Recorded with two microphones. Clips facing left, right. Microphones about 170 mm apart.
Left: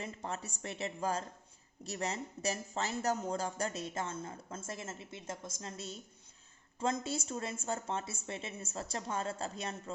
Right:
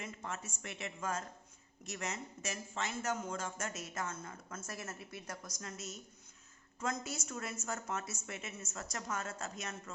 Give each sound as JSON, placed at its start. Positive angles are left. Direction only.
{"t": 0.0, "sound": "a woman's voice", "side_deg": 35}